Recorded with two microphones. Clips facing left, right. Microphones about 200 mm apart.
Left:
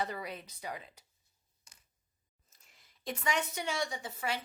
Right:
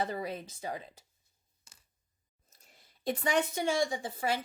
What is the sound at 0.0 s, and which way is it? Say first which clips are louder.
Speech: right 4 dB; 30° right (ahead or behind).